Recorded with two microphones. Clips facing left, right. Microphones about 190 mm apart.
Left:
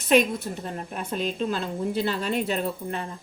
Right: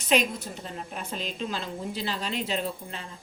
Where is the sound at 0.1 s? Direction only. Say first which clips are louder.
Left 5 dB; 55° left (ahead or behind).